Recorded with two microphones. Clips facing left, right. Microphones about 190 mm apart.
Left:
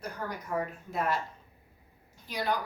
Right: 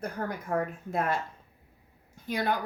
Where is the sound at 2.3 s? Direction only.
55° right (ahead or behind).